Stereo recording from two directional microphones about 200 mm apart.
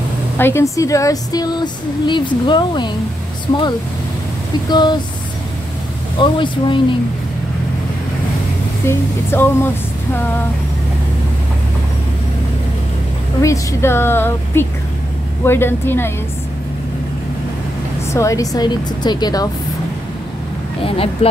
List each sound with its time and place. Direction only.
0.4 s speech: 10° left (ahead or behind)
4.6 s speech: 20° left (ahead or behind)
6.1 s speech: 25° left (ahead or behind)
8.8 s a woman's voice: 10° left (ahead or behind)
13.4 s a woman's voice: 15° left (ahead or behind)
18.1 s speech: 15° left (ahead or behind)
20.8 s speech: 30° left (ahead or behind)